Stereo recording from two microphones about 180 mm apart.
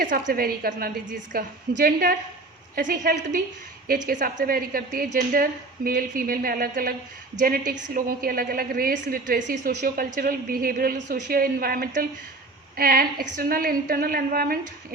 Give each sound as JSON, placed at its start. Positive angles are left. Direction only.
{"t": 0.0, "sound": "a woman's voice", "side_deg": -50}